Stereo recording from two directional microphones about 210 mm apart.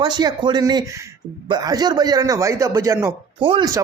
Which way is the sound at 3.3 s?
25° right (ahead or behind).